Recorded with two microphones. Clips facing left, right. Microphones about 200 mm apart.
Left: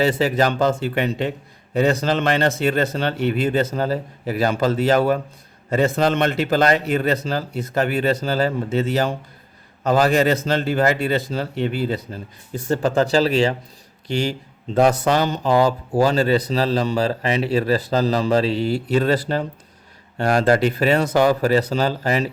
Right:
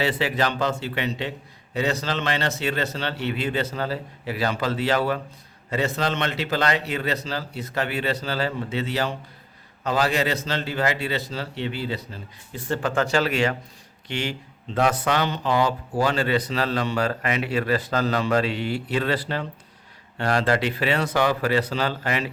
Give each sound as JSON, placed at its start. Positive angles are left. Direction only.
{"t": 0.0, "sound": "a man's voice", "side_deg": 45}